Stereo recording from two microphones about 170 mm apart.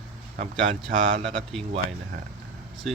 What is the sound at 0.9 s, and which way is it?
Speech, 50° right (ahead or behind).